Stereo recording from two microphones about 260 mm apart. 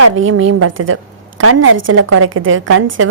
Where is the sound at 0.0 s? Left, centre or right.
Right.